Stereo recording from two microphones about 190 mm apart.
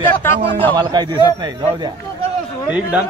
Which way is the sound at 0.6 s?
25° right (ahead or behind).